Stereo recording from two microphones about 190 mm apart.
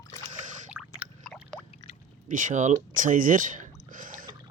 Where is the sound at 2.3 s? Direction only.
40° right (ahead or behind).